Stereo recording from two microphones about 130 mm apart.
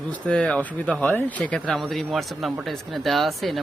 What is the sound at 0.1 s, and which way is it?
Speech, 10° left (ahead or behind).